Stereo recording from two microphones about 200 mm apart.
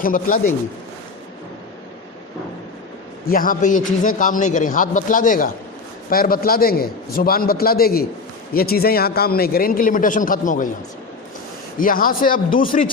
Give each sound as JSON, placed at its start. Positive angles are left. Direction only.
{"t": 0.0, "sound": "a man's voice", "side_deg": 45}
{"t": 3.2, "sound": "a man's voice", "side_deg": 45}
{"t": 11.8, "sound": "a man's voice", "side_deg": 45}